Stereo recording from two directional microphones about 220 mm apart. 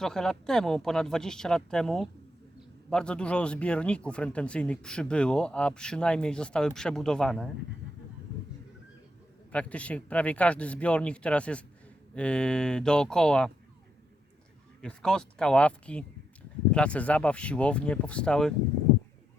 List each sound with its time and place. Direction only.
0.0 s speech: centre (ahead or behind)
9.5 s speech: 5° left (ahead or behind)
14.8 s speech: 5° left (ahead or behind)